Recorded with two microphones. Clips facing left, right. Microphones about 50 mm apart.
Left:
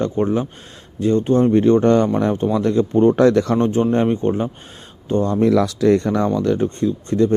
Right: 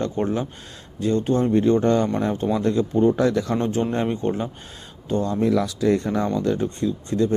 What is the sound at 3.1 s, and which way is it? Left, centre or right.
Speech, left.